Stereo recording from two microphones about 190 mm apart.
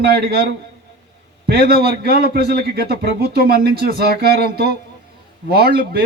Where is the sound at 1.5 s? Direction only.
55° right (ahead or behind).